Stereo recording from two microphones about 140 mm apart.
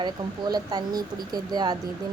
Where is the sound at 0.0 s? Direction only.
30° right (ahead or behind).